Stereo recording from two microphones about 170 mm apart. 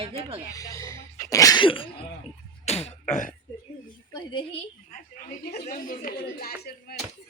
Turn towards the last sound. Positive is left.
turn(degrees=60)  # may be behind; listen again after turning